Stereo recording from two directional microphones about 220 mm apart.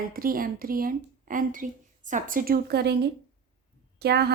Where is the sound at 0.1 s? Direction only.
40° right (ahead or behind).